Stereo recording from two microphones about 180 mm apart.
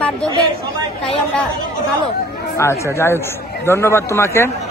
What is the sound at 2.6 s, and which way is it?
Speech, 15° left (ahead or behind).